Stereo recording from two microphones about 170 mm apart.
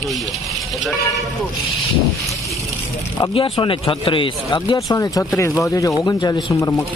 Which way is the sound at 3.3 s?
30° left (ahead or behind).